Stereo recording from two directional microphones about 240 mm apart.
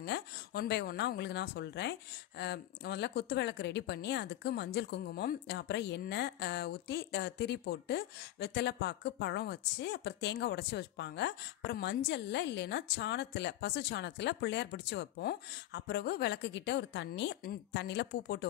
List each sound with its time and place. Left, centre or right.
0.0 s a woman's voice: left